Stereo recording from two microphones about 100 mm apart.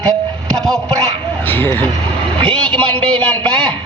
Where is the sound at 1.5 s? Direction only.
20° left (ahead or behind).